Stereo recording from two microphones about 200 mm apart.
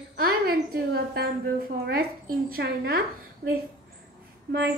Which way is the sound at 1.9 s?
50° right (ahead or behind).